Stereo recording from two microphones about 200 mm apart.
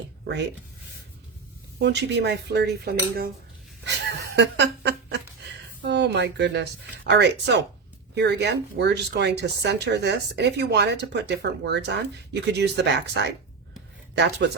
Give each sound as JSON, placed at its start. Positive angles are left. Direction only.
{"t": 1.8, "sound": "speech", "side_deg": -60}
{"t": 3.8, "sound": "speech", "side_deg": -60}